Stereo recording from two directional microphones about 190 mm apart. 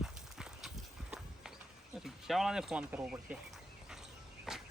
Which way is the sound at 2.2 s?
Centre (ahead or behind).